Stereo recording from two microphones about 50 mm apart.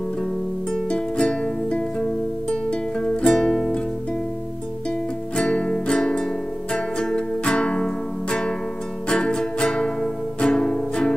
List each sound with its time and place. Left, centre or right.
0.8 s music: centre
3.3 s music: centre
5.3 s music: centre